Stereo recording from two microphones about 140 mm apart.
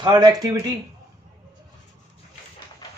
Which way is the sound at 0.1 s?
25° right (ahead or behind).